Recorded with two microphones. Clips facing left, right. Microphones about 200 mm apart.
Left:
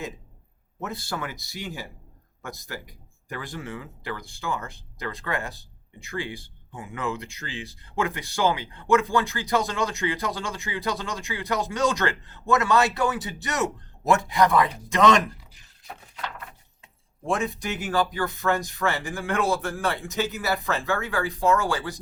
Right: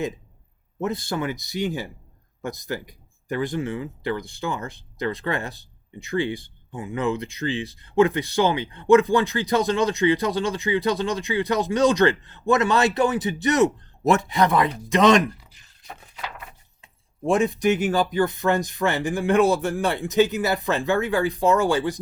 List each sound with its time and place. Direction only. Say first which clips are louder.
0.8 s speech: right 6 dB; 20° right (ahead or behind)
15.5 s a sound: right 1 dB; centre (ahead or behind)
17.2 s speech: right 8 dB; 20° right (ahead or behind)